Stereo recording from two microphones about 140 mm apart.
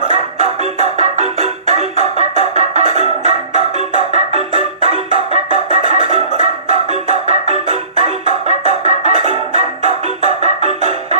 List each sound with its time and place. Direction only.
0.1 s music: 55° right (ahead or behind)